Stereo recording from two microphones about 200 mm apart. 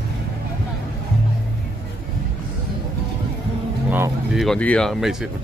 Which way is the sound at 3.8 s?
10° right (ahead or behind).